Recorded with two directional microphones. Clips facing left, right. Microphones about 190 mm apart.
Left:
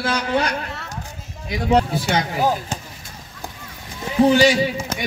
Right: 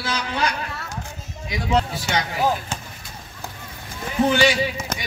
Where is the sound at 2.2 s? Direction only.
40° left (ahead or behind).